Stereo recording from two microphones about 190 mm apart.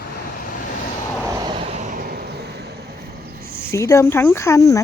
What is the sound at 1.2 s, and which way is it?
Vehicle, 20° right (ahead or behind).